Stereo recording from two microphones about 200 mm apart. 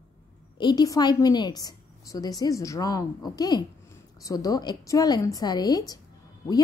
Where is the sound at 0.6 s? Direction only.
20° left (ahead or behind).